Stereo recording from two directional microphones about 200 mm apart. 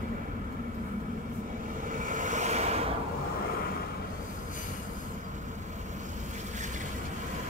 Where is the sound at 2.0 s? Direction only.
40° right (ahead or behind).